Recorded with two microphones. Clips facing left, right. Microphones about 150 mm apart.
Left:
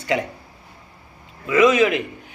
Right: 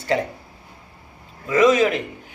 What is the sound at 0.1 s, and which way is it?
Speech, 40° right (ahead or behind).